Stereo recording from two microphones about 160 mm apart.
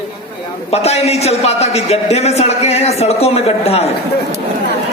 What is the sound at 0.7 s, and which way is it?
A man's voice, 40° left (ahead or behind).